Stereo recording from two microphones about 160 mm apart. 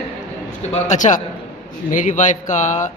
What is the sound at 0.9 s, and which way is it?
Speech, 50° left (ahead or behind).